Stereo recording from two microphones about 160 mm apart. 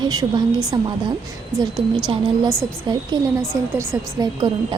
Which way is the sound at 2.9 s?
25° right (ahead or behind).